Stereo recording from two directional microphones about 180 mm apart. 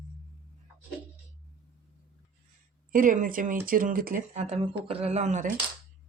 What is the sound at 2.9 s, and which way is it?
Speech, 50° right (ahead or behind).